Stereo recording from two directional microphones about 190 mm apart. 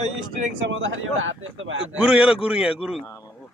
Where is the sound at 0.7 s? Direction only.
90° right.